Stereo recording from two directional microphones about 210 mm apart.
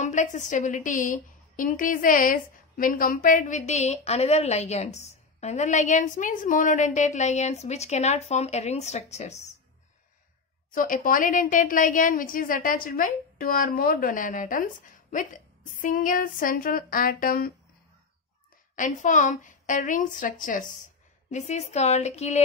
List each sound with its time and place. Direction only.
0.0 s a woman's voice: 35° left (ahead or behind)
10.7 s a woman's voice: 40° left (ahead or behind)
18.8 s a woman's voice: 35° left (ahead or behind)